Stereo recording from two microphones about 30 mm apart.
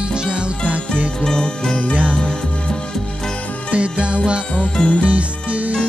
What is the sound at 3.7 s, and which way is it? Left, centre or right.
Music, right.